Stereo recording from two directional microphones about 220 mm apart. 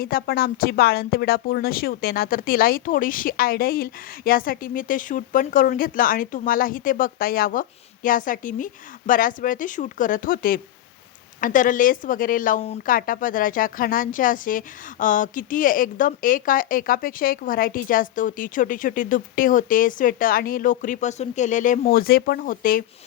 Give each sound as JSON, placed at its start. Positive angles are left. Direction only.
{"t": 0.0, "sound": "speech", "side_deg": 40}